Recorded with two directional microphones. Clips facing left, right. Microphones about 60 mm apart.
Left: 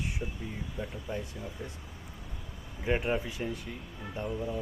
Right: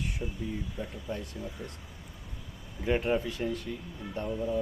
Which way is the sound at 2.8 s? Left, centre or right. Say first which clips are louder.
Right 2 dB; centre.